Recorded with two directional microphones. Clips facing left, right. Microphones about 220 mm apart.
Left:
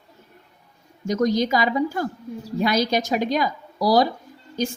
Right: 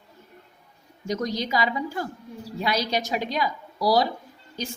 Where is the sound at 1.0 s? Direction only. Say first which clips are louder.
Left 7 dB; 45° left (ahead or behind).